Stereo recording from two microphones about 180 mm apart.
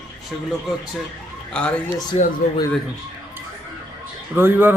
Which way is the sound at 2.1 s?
35° left (ahead or behind).